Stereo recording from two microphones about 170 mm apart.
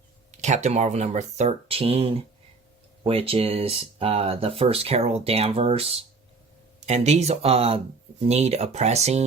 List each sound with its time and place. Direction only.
0.3 s speech: 45° right (ahead or behind)